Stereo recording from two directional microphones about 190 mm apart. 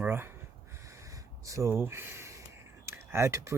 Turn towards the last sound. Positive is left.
turn(degrees=-15)  # may be behind; listen again after turning